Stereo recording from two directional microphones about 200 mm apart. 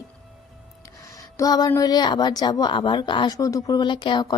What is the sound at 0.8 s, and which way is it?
Speech, 15° left (ahead or behind).